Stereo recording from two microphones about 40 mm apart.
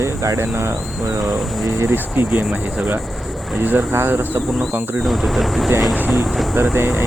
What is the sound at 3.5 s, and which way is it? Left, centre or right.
Speech, right.